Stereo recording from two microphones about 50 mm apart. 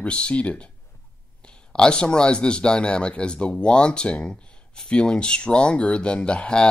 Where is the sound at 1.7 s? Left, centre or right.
Centre.